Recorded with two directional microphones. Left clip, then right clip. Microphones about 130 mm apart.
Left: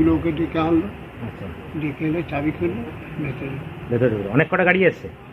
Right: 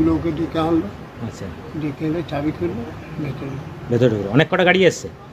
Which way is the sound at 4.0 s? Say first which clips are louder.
Right 2 dB; 90° right.